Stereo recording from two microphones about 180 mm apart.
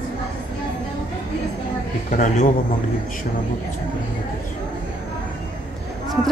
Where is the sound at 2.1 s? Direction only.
45° left (ahead or behind).